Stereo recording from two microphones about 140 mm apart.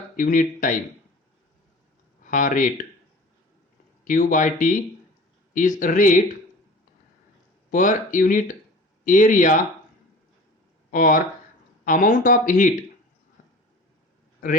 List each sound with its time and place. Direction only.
0.2 s speech: 75° left (ahead or behind)
2.2 s speech: 70° left (ahead or behind)
4.0 s speech: 75° left (ahead or behind)
7.7 s speech: 70° left (ahead or behind)
10.9 s speech: 85° left
11.9 s speech: 70° left (ahead or behind)